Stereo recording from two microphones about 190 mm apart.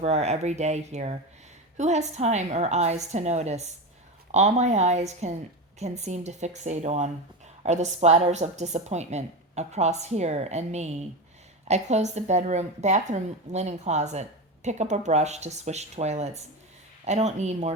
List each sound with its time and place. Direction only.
0.0 s a woman's voice: 35° right (ahead or behind)